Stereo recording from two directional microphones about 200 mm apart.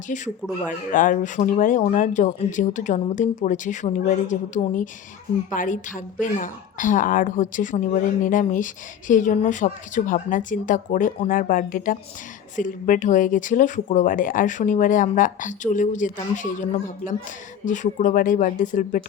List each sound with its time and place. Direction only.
0.1 s speech: 45° left (ahead or behind)
17.7 s speech: 40° left (ahead or behind)